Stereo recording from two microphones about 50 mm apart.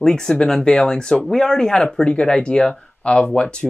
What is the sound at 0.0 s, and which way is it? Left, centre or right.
Speech, centre.